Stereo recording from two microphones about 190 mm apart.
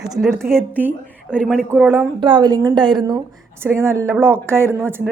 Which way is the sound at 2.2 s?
25° right (ahead or behind).